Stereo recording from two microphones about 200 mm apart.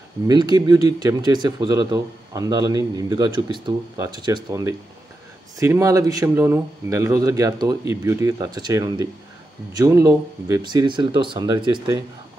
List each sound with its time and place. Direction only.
0.3 s speech: 20° right (ahead or behind)